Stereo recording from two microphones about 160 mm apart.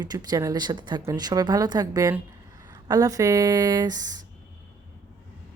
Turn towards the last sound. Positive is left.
turn(degrees=-25)  # may be behind; listen again after turning